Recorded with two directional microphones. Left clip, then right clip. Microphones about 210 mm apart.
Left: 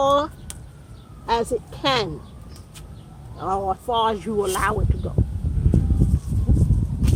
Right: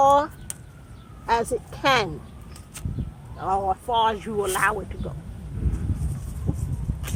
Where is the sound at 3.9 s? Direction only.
55° left (ahead or behind).